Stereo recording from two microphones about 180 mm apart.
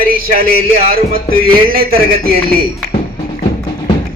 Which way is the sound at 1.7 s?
55° right (ahead or behind).